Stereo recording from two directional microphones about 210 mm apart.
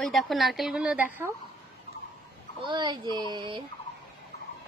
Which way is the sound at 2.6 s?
20° right (ahead or behind).